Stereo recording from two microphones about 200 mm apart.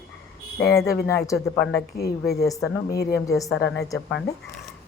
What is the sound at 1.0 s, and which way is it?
Speech, 15° left (ahead or behind).